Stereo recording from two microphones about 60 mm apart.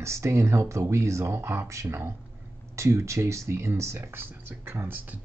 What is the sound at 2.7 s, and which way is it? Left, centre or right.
Speech, right.